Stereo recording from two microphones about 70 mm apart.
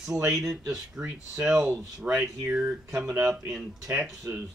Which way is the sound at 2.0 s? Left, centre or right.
Right.